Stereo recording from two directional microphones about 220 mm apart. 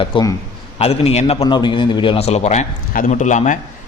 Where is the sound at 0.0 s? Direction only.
20° left (ahead or behind).